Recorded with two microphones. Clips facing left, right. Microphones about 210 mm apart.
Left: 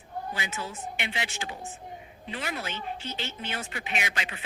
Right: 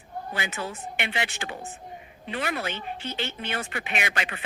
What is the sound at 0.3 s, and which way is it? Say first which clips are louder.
A woman's voice: right 3 dB; 60° right (ahead or behind).